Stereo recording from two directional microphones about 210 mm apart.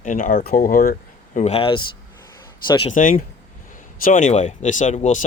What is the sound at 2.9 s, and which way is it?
Speech, 40° left (ahead or behind).